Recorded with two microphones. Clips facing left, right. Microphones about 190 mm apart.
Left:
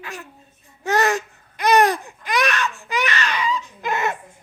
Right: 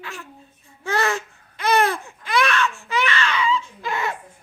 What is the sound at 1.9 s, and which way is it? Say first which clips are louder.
Baby cry: right 1 dB; 15° left (ahead or behind).